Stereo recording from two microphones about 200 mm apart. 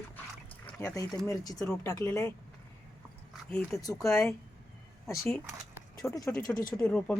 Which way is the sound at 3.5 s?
15° left (ahead or behind).